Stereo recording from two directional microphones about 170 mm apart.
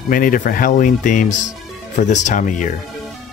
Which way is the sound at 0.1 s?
55° left (ahead or behind).